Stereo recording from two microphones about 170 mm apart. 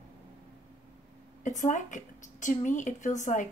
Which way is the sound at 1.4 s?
50° left (ahead or behind).